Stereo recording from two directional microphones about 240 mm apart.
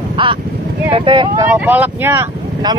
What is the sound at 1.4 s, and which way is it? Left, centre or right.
Speech, centre.